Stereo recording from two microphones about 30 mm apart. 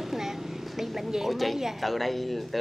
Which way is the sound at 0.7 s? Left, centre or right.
Centre.